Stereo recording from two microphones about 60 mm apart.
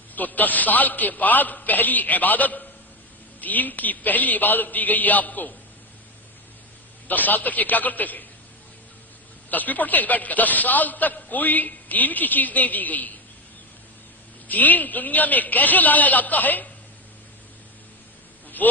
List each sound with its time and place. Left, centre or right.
0.2 s a man's voice: left
7.1 s a man's voice: left
9.5 s a man's voice: left
14.4 s a man's voice: left
18.6 s speech: left